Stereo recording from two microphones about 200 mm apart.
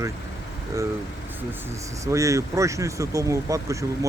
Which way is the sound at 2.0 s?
15° right (ahead or behind).